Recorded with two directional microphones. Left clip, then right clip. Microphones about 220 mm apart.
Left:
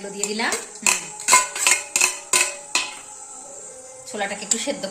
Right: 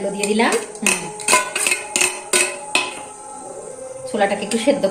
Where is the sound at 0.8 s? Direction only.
Centre (ahead or behind).